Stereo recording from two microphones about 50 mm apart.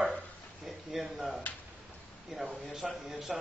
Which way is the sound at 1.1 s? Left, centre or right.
Centre.